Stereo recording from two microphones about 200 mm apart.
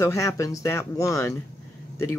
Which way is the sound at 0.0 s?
15° left (ahead or behind).